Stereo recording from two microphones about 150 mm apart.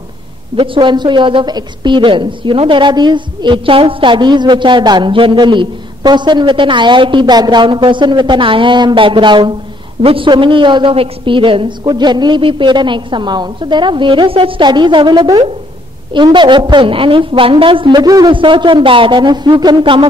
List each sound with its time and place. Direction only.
0.6 s a woman's voice: 30° right (ahead or behind)